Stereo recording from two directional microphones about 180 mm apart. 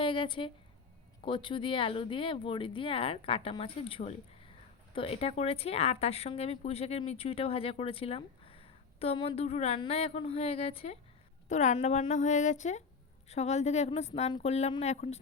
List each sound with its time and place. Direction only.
0.0 s a woman's voice: 30° left (ahead or behind)